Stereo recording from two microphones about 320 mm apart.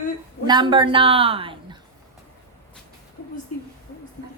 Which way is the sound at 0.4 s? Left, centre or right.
Centre.